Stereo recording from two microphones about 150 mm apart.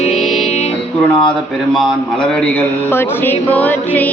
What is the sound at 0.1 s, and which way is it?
Music, centre (ahead or behind).